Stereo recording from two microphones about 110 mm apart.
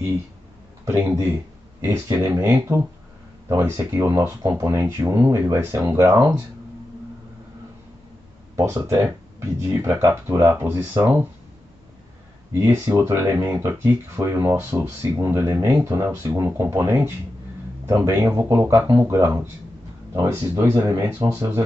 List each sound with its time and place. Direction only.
0.8 s speech: 20° right (ahead or behind)
8.7 s speech: 25° right (ahead or behind)
12.5 s speech: 25° right (ahead or behind)
19.0 s speech: 30° right (ahead or behind)